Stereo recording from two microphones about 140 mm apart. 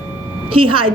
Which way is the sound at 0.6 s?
40° right (ahead or behind).